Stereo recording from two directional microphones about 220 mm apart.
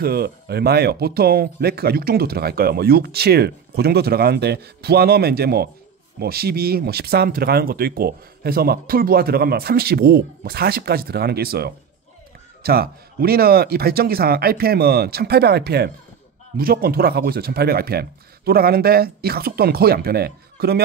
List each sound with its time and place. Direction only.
0.0 s speech: 45° right (ahead or behind)